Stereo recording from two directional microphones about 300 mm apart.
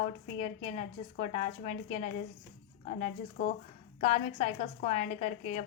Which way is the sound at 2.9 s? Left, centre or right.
Left.